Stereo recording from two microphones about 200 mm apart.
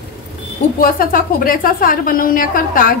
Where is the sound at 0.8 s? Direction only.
45° left (ahead or behind).